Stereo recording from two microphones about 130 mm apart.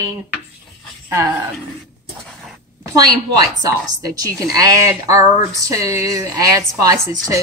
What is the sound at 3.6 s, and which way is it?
Speech, 30° right (ahead or behind).